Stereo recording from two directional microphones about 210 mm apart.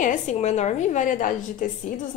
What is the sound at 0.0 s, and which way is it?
A woman's voice, 35° left (ahead or behind).